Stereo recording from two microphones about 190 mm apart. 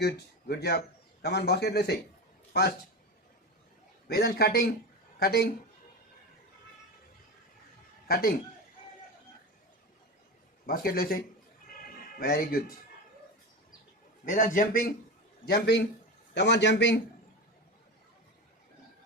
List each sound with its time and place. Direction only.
0.0 s a man's voice: 60° left (ahead or behind)
4.1 s a man's voice: 55° left (ahead or behind)
8.0 s a man's voice: 50° left (ahead or behind)
10.7 s a man's voice: 50° left (ahead or behind)
12.2 s a man's voice: 50° left (ahead or behind)
14.3 s a man's voice: 45° left (ahead or behind); by 17.0 s 65° left (ahead or behind)